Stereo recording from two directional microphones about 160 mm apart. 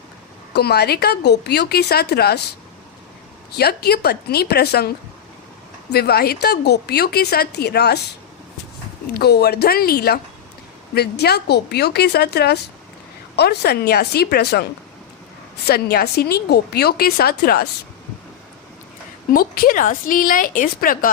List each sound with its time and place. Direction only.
0.5 s a woman's voice: 90° left
3.5 s a woman's voice: 80° left
5.9 s a woman's voice: 80° left
9.1 s a woman's voice: 90° left; by 10.2 s 75° left (ahead or behind)
10.9 s a woman's voice: 90° left; by 17.7 s 75° left (ahead or behind)
19.3 s speech: 65° left (ahead or behind)